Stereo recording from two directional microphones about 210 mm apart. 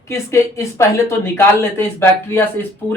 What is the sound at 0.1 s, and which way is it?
A woman's voice, 15° left (ahead or behind).